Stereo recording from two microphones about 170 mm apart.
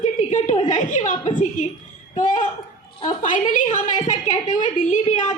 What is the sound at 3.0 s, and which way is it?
A woman's voice, 45° left (ahead or behind).